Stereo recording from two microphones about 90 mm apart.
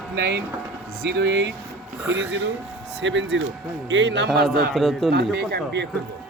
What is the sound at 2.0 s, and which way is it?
Speech, 15° right (ahead or behind).